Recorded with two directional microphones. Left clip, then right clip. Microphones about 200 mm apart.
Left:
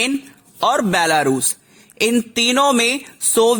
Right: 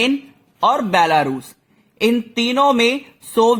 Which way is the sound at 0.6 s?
40° left (ahead or behind).